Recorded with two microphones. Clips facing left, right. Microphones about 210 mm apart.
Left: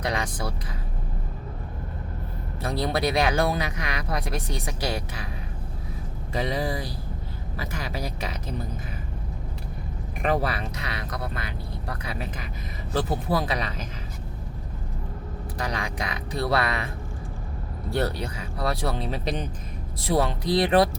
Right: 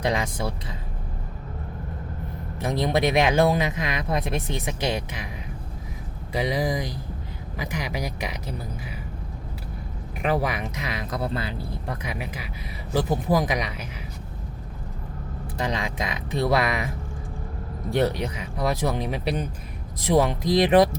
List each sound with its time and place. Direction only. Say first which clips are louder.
0.0 s speech: right 3 dB; 25° right (ahead or behind)
2.6 s speech: right 3 dB; 20° right (ahead or behind)
6.3 s speech: right 2 dB; 10° right (ahead or behind)
10.2 s speech: right 1 dB; 10° right (ahead or behind); by 11.9 s 25° right (ahead or behind)
12.0 s speech: right 1 dB; 10° right (ahead or behind)
15.5 s speech: right 3 dB; 25° right (ahead or behind)
17.9 s speech: right 4 dB; 20° right (ahead or behind)